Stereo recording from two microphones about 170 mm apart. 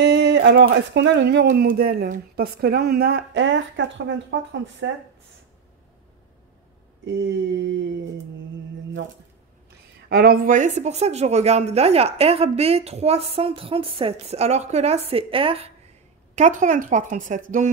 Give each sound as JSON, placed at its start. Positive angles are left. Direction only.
{"t": 0.0, "sound": "speech", "side_deg": -90}
{"t": 7.2, "sound": "a sound", "side_deg": -90}
{"t": 10.0, "sound": "a woman's voice", "side_deg": -65}
{"t": 16.3, "sound": "speech", "side_deg": -45}